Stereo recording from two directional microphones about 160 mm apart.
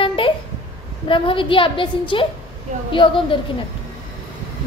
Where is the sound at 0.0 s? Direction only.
35° left (ahead or behind).